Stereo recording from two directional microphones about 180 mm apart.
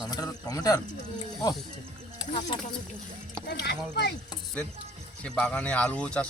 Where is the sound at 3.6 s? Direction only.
65° left (ahead or behind).